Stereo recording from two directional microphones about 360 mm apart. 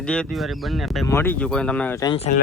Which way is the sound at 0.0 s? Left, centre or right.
Centre.